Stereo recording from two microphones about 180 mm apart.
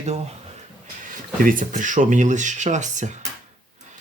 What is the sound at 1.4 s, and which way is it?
Speech, 50° right (ahead or behind).